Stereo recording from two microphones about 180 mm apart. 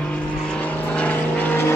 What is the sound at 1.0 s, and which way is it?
Vehicle, 10° left (ahead or behind).